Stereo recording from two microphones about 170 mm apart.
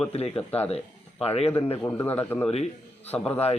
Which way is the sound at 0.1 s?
35° left (ahead or behind).